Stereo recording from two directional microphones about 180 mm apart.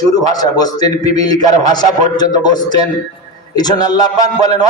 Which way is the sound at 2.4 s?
25° left (ahead or behind).